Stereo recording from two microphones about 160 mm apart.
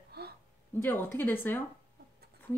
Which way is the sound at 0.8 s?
15° left (ahead or behind).